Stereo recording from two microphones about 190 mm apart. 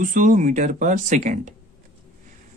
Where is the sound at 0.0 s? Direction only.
45° right (ahead or behind).